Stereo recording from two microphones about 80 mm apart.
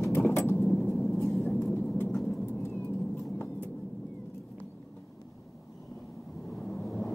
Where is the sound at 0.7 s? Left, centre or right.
Left.